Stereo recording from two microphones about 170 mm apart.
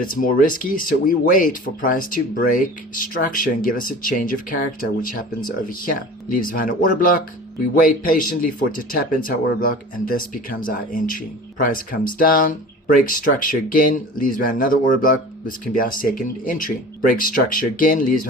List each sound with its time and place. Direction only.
0.1 s speech: 55° left (ahead or behind)